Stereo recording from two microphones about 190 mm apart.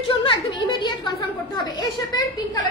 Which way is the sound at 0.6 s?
25° left (ahead or behind).